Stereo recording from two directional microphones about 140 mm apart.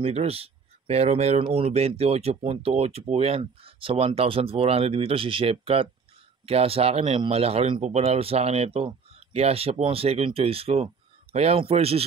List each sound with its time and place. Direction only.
0.0 s speech: 45° right (ahead or behind)